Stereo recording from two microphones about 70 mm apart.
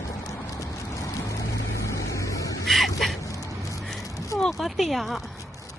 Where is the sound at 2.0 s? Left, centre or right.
Left.